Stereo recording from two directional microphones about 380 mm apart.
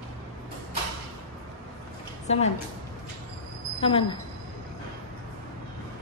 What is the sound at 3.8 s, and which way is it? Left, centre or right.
Speech, centre.